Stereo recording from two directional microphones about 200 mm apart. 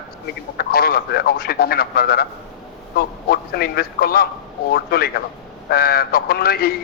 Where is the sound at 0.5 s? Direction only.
50° left (ahead or behind).